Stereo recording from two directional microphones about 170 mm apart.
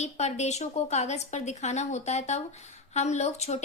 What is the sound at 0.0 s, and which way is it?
A woman's voice, 40° left (ahead or behind).